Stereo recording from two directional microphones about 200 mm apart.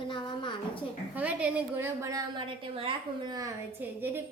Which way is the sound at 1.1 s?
5° right (ahead or behind).